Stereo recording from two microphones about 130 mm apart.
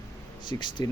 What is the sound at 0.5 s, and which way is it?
Speech, 25° left (ahead or behind).